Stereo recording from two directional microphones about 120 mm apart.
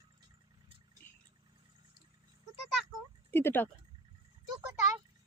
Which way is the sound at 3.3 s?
20° left (ahead or behind).